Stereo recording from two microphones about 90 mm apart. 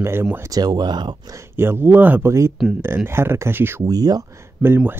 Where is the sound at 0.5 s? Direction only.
45° right (ahead or behind).